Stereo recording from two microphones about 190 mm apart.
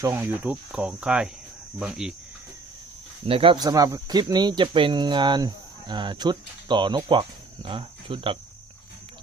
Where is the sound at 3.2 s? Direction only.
30° right (ahead or behind).